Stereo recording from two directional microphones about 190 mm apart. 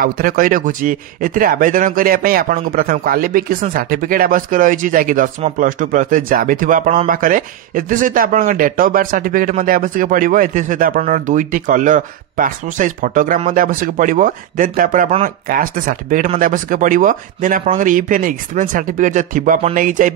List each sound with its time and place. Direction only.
0.0 s speech: 50° right (ahead or behind)